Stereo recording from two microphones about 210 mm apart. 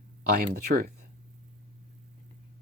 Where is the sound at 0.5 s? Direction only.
45° right (ahead or behind).